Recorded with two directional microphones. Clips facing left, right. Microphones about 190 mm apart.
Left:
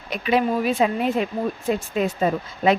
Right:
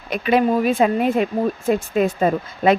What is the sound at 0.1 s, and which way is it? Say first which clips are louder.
Speech: right 4 dB; 55° right (ahead or behind).